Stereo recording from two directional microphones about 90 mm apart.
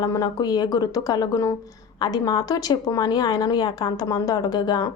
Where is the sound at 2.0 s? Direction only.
45° left (ahead or behind).